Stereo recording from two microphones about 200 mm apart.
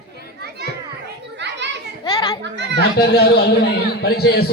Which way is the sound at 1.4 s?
60° right (ahead or behind).